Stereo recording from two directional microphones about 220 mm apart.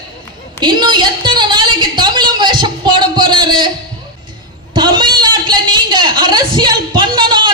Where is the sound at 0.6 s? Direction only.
20° right (ahead or behind).